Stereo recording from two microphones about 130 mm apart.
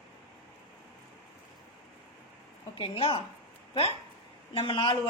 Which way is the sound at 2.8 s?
40° left (ahead or behind).